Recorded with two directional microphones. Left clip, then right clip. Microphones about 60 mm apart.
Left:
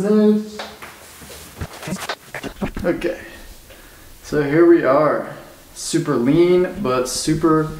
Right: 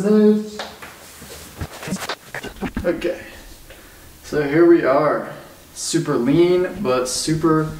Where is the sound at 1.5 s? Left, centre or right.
Centre.